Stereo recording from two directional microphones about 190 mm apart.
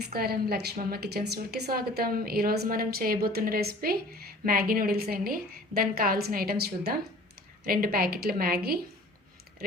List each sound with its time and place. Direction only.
0.0 s a woman's voice: 55° right (ahead or behind)